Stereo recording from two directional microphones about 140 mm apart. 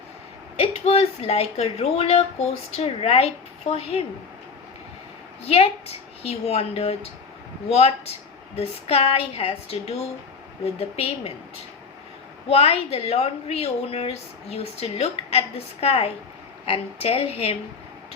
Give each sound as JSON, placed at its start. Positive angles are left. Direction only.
{"t": 0.5, "sound": "a woman's voice", "side_deg": 45}
{"t": 5.5, "sound": "a woman's voice", "side_deg": 45}